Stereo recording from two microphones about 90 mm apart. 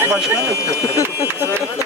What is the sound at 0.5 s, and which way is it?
Speech, 35° left (ahead or behind).